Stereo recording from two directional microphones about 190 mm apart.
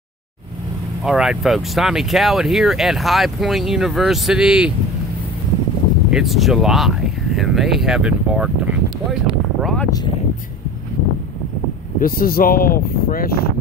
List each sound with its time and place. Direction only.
1.0 s speech: centre (ahead or behind)
6.0 s speech: centre (ahead or behind)
9.6 s speech: 5° left (ahead or behind)
12.0 s speech: 50° left (ahead or behind)